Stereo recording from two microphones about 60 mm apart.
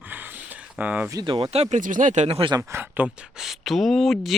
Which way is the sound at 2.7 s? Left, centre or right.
Right.